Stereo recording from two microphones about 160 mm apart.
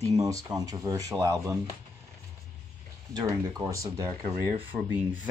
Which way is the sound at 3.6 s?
20° right (ahead or behind).